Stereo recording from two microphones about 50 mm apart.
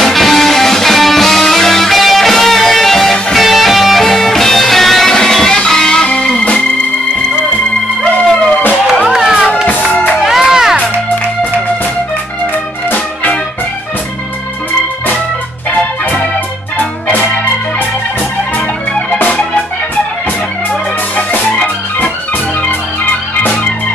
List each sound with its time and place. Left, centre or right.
0.0 s music: centre; by 6.6 s left
9.1 s run: centre
9.7 s music: left
10.2 s music: centre
12.9 s music: left
15.7 s organ: left